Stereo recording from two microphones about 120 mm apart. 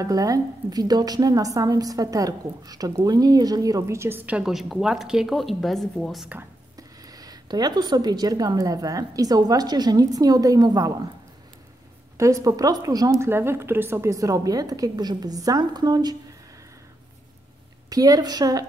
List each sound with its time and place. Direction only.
0.0 s a woman's voice: 30° right (ahead or behind); by 6.2 s centre (ahead or behind)
6.8 s speech: 30° right (ahead or behind)
12.2 s a woman's voice: 25° right (ahead or behind)
17.8 s speech: 30° right (ahead or behind)